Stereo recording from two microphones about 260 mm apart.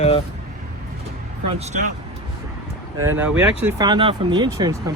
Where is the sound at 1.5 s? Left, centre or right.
Right.